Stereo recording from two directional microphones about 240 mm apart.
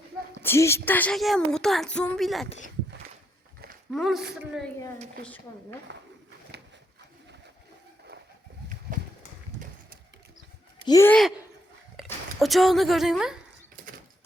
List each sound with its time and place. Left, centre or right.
0.4 s a woman's voice: centre
3.9 s a woman's voice: centre
6.5 s pigeon: right
8.9 s horse: right
10.8 s speech: centre